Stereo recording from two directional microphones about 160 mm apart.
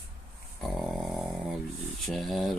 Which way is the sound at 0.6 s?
Centre (ahead or behind).